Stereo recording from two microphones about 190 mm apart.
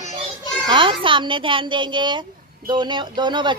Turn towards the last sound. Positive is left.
turn(degrees=-25)  # may be behind; listen again after turning